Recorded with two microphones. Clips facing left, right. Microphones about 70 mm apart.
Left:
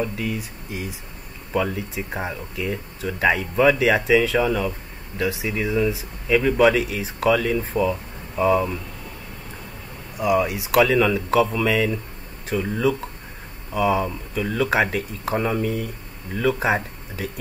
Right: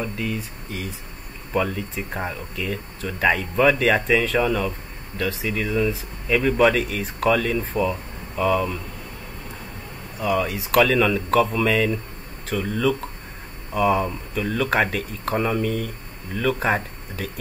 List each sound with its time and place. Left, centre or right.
1.5 s speech: centre
8.4 s speech: left
10.1 s speech: centre
12.4 s speech: centre
13.7 s speech: centre